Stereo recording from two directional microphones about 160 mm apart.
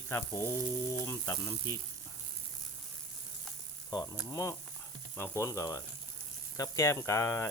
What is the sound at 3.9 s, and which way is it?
Speech, 20° left (ahead or behind).